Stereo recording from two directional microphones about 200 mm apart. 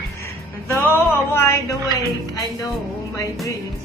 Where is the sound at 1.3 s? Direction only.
10° left (ahead or behind).